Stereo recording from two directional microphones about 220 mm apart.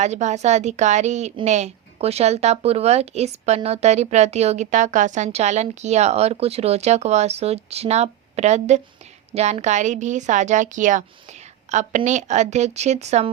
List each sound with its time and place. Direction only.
0.0 s a woman's voice: 30° right (ahead or behind)